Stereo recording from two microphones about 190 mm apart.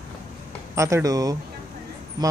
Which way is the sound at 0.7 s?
15° right (ahead or behind).